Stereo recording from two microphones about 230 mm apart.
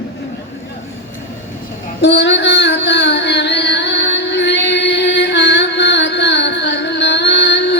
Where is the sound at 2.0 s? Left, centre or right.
Left.